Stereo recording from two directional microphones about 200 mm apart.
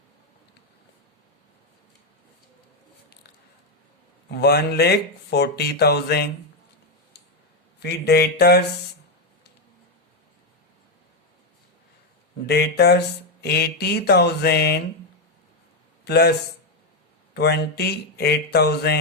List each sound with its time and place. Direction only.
4.3 s speech: 55° left (ahead or behind)
7.8 s speech: 55° left (ahead or behind)
12.5 s speech: 55° left (ahead or behind)
16.0 s a man's voice: 55° left (ahead or behind)
17.3 s speech: 55° left (ahead or behind)